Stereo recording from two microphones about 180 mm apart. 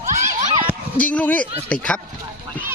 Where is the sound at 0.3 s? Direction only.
40° right (ahead or behind).